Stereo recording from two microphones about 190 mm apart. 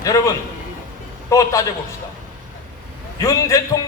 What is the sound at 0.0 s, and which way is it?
A man's voice, 15° left (ahead or behind).